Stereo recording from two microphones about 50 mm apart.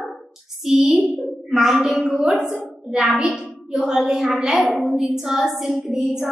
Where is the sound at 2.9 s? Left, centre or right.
Right.